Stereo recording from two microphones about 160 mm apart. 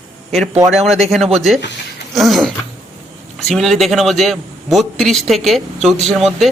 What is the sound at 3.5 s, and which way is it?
A man's voice, centre (ahead or behind).